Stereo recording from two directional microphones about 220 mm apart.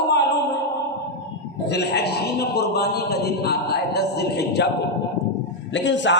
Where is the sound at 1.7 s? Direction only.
50° left (ahead or behind).